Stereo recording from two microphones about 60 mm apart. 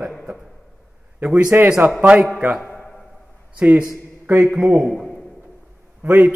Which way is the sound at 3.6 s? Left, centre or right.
Right.